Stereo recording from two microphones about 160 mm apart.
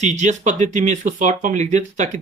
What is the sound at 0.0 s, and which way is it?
Speech, 50° right (ahead or behind).